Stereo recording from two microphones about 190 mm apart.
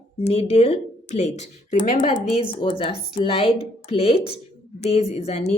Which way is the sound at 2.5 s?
25° left (ahead or behind).